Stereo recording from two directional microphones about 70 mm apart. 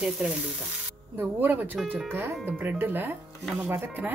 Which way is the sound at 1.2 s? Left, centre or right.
Right.